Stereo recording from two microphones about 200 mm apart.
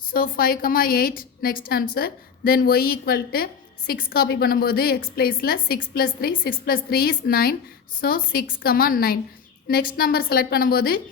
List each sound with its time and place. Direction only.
0.1 s a woman's voice: 45° left (ahead or behind)